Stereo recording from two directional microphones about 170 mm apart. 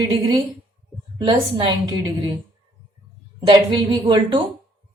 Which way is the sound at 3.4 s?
25° right (ahead or behind).